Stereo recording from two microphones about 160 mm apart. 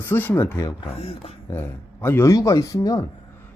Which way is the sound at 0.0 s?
15° left (ahead or behind).